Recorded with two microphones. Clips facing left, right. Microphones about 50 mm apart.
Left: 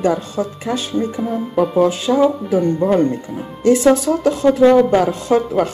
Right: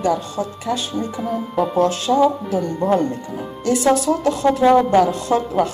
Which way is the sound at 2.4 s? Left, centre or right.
Left.